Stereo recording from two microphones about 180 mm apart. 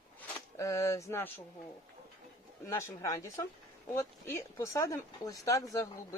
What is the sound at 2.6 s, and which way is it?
Speech, 15° left (ahead or behind).